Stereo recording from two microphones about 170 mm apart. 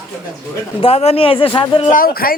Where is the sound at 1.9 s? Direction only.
55° left (ahead or behind).